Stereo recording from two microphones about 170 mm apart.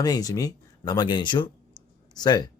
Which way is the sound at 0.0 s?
20° left (ahead or behind).